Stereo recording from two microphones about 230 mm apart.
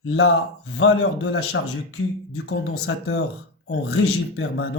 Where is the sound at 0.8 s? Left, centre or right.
Left.